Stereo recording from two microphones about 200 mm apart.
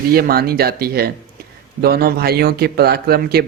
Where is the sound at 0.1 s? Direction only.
50° right (ahead or behind).